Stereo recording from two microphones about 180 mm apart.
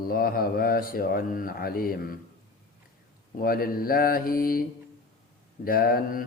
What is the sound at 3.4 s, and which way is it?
A man's voice, 55° left (ahead or behind).